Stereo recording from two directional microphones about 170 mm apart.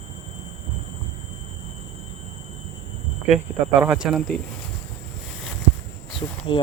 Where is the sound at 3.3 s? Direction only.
5° right (ahead or behind).